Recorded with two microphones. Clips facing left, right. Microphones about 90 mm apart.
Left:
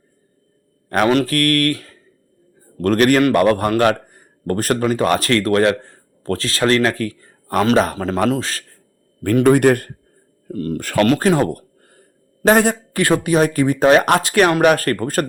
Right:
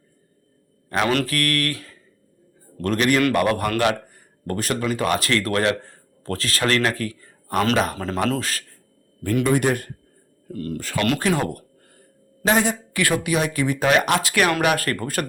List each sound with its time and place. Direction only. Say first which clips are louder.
1.0 s a man's voice: left 7 dB; 35° left (ahead or behind)
7.9 s a man's voice: left 5 dB; 25° left (ahead or behind)
9.3 s speech: left 7 dB; 50° left (ahead or behind)
10.5 s speech: left 6 dB; 40° left (ahead or behind)
10.8 s speech: left 9 dB; 60° left (ahead or behind)
11.0 s a man's voice: left 7 dB; 35° left (ahead or behind)
13.0 s speech: left 6 dB; 35° left (ahead or behind)